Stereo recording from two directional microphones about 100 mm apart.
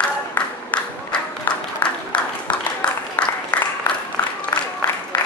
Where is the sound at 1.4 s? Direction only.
15° left (ahead or behind).